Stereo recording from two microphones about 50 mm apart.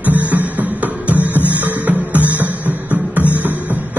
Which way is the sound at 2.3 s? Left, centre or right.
Left.